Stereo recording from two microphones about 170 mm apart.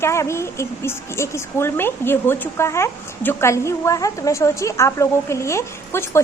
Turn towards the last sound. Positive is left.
turn(degrees=15)  # may be behind; listen again after turning